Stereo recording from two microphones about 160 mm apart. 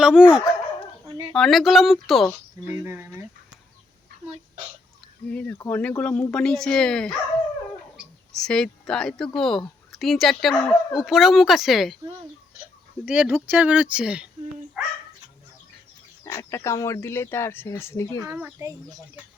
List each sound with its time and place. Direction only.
0.0 s speech: 5° right (ahead or behind)
1.0 s a sound: 30° right (ahead or behind)
1.4 s speech: centre (ahead or behind)
2.6 s speech: 15° right (ahead or behind)
5.3 s speech: 10° left (ahead or behind)
8.3 s speech: 5° left (ahead or behind)
13.1 s speech: 10° right (ahead or behind)
16.2 s speech: 20° left (ahead or behind)
18.3 s speech: 10° right (ahead or behind)
18.6 s speech: 20° right (ahead or behind)